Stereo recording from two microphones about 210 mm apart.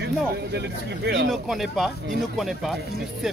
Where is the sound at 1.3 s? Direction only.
Centre (ahead or behind).